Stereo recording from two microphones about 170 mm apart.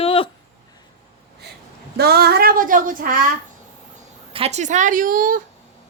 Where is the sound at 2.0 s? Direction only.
70° right (ahead or behind).